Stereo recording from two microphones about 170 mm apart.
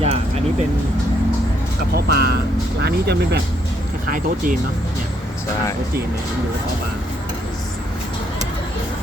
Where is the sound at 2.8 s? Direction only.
75° right (ahead or behind).